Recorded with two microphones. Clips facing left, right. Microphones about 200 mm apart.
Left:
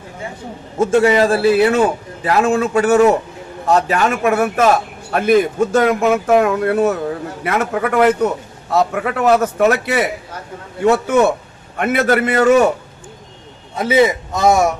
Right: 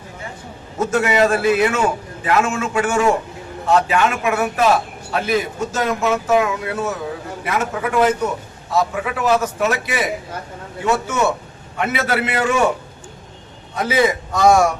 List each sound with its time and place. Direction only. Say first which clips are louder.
0.8 s a man's voice: left 4 dB; 30° left (ahead or behind)
13.7 s a man's voice: left 4 dB; 25° left (ahead or behind)